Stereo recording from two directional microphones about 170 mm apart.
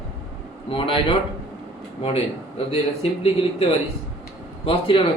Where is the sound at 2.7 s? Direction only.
35° left (ahead or behind).